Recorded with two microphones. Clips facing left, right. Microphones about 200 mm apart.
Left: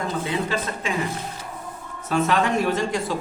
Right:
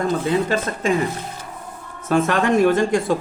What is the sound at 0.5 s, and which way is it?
Speech, 45° right (ahead or behind).